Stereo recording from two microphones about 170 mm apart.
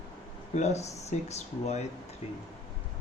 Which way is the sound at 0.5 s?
40° left (ahead or behind).